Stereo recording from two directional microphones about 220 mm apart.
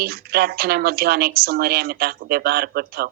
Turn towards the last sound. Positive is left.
turn(degrees=-45)  # may be behind; listen again after turning